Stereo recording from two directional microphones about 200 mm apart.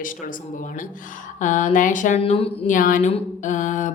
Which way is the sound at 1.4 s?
40° left (ahead or behind).